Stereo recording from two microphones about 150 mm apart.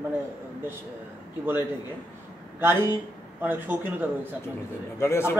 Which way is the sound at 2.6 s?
15° right (ahead or behind).